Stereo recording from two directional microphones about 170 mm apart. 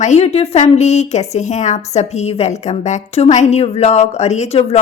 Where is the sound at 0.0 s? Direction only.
40° left (ahead or behind).